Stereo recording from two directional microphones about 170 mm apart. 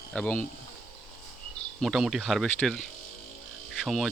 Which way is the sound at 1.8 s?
Centre (ahead or behind).